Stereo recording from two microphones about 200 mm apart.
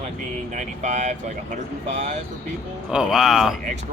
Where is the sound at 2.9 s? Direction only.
5° right (ahead or behind).